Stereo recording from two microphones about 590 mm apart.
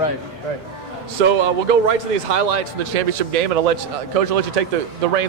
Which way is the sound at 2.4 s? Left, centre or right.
Right.